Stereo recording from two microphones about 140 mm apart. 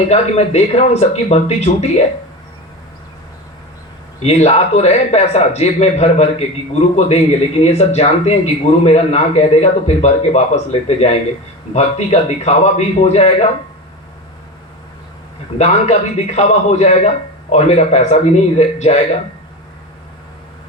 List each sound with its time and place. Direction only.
0.1 s a man's voice: 50° left (ahead or behind)
4.2 s a man's voice: 50° left (ahead or behind)
15.5 s a man's voice: 55° left (ahead or behind)